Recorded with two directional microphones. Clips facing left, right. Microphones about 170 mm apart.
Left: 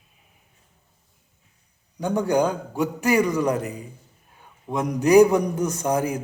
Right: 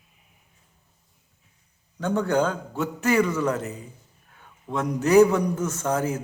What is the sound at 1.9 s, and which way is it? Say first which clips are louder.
A man's voice: left 1 dB; 15° left (ahead or behind).